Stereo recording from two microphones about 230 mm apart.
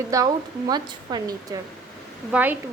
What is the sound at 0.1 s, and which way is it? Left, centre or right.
A woman's voice, centre.